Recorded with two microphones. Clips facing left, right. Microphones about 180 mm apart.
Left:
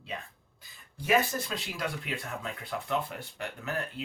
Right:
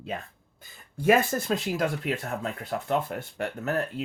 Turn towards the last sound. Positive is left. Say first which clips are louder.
# right 7 dB
turn(degrees=-45)  # may be behind; listen again after turning